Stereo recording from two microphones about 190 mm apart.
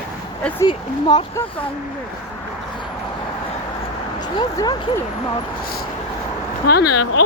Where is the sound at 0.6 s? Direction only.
25° left (ahead or behind).